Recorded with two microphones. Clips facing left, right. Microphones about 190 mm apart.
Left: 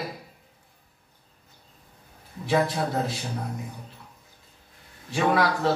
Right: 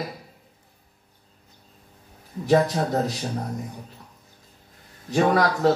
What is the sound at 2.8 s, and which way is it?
Speech, 45° right (ahead or behind).